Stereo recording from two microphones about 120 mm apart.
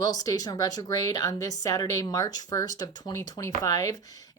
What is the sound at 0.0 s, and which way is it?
Speech, 30° left (ahead or behind).